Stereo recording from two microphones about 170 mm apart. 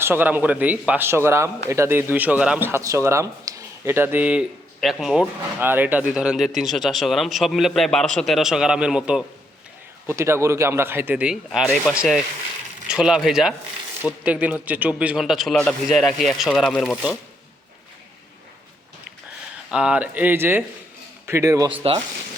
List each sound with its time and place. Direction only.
0.0 s speech: 10° right (ahead or behind)
5.5 s speech: 10° right (ahead or behind); by 17.0 s 5° left (ahead or behind)
19.7 s a man's voice: 5° right (ahead or behind)